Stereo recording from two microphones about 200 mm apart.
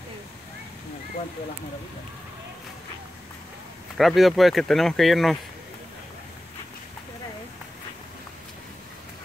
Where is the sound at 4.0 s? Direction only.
Centre (ahead or behind).